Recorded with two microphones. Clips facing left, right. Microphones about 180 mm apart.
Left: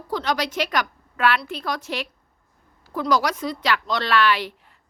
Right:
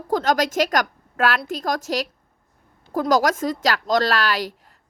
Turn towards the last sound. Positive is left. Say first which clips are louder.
# left 1 dB
turn(degrees=-40)  # may be behind; listen again after turning